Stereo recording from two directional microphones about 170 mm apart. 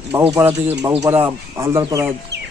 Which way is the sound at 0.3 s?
10° right (ahead or behind).